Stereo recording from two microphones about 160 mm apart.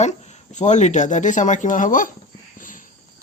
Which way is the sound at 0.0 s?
45° left (ahead or behind).